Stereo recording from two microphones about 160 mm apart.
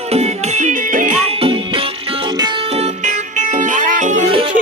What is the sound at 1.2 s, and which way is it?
Music, 35° right (ahead or behind).